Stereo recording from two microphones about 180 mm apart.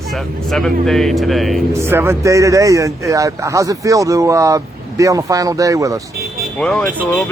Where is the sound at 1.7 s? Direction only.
15° right (ahead or behind).